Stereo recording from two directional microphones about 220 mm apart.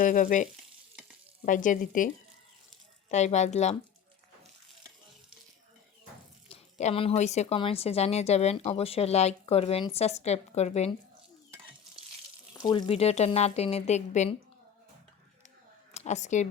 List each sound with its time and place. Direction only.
0.0 s speech: 35° left (ahead or behind)
1.5 s speech: 35° left (ahead or behind)
3.1 s speech: 30° left (ahead or behind)
6.5 s speech: 30° left (ahead or behind)
12.5 s speech: 20° left (ahead or behind)
15.9 s speech: 30° left (ahead or behind)